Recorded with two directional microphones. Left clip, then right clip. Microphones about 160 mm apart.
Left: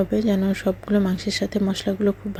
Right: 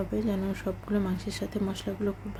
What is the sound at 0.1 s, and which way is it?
A woman's voice, 45° left (ahead or behind).